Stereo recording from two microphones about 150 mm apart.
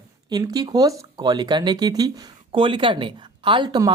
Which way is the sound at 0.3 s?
25° right (ahead or behind).